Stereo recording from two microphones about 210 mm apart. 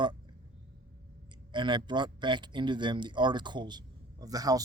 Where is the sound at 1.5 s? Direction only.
20° right (ahead or behind).